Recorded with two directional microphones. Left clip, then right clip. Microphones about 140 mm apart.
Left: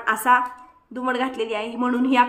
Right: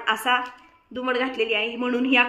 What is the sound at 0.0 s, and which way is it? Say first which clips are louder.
Speech: left 4 dB; 35° left (ahead or behind).